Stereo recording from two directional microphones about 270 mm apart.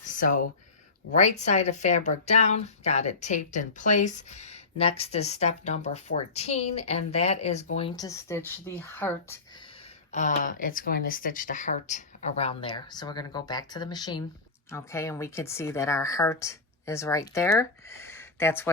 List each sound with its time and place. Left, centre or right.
0.0 s a sound: left
1.1 s speech: left; by 9.4 s centre
10.1 s a woman's voice: left; by 18.7 s centre